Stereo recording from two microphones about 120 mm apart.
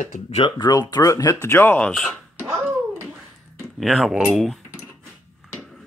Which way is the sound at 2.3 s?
20° right (ahead or behind).